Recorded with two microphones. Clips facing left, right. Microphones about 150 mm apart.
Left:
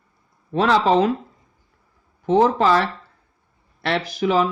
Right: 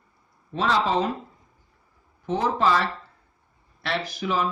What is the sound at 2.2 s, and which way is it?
Speech, 90° left.